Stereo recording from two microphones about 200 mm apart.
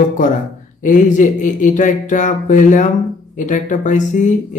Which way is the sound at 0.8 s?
40° left (ahead or behind).